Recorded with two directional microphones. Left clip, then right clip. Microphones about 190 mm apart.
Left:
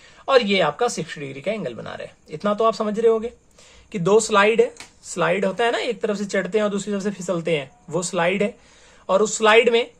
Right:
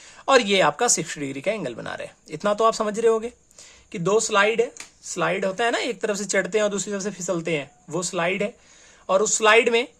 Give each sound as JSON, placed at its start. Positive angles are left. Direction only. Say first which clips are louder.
{"t": 0.3, "sound": "speech", "louder": "even", "side_deg": -30}
{"t": 3.9, "sound": "speech", "louder": "left 3 dB", "side_deg": -10}